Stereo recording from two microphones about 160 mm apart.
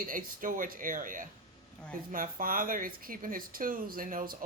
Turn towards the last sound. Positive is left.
turn(degrees=-60)  # may be behind; listen again after turning